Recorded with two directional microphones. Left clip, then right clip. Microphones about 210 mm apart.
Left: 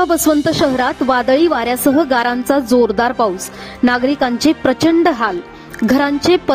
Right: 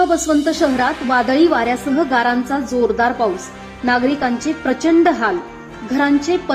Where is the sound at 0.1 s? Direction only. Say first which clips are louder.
Left 2 dB; 45° left (ahead or behind).